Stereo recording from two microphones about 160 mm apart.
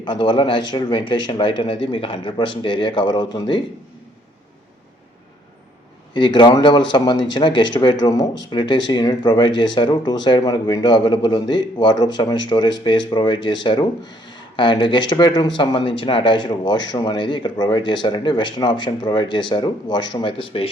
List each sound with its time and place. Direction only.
0.0 s speech: 30° left (ahead or behind)
6.1 s speech: 30° left (ahead or behind)